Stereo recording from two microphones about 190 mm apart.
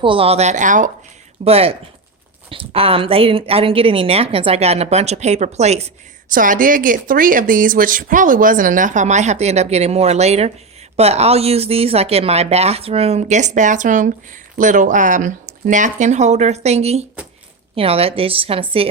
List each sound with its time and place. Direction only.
0.0 s a woman's voice: 30° right (ahead or behind)